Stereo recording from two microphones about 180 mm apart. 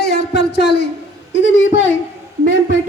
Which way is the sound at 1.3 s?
90° left.